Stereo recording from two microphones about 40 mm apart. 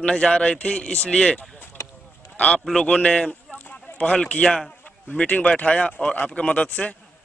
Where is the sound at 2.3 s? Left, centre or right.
Left.